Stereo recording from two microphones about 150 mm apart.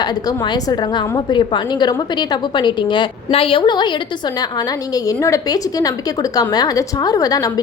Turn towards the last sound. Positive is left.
turn(degrees=25)  # may be behind; listen again after turning